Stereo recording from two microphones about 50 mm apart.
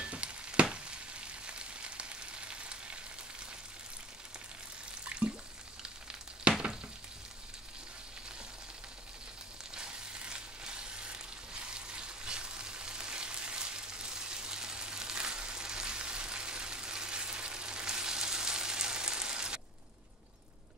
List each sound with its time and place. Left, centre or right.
0.0 s frying: right
5.0 s water: right
6.5 s frying: right
9.8 s frying: centre